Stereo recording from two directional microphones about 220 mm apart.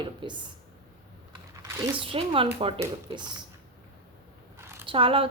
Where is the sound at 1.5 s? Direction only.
15° right (ahead or behind).